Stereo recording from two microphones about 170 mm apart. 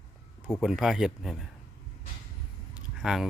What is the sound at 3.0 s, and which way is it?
Speech, centre (ahead or behind).